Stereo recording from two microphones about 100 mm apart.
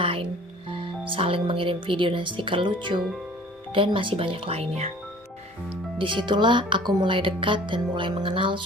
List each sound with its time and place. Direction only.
0.0 s music: 65° right (ahead or behind)
0.7 s speech: 60° right (ahead or behind); by 4.9 s 85° right
6.0 s speech: 55° right (ahead or behind)